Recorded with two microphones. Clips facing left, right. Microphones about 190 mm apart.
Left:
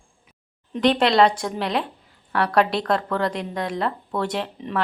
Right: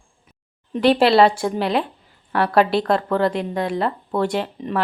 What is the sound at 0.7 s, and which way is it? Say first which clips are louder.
Speech: right 4 dB; 5° right (ahead or behind).